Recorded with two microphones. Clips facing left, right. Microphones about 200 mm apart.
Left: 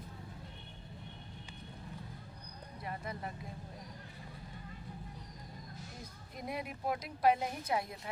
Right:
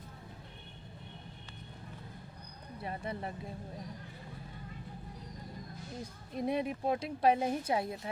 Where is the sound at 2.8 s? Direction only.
30° right (ahead or behind).